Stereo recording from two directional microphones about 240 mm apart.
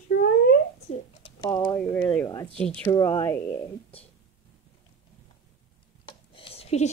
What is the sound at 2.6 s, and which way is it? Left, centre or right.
A woman's voice, centre.